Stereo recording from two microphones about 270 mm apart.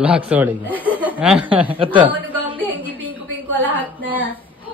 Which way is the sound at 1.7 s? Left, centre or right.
Centre.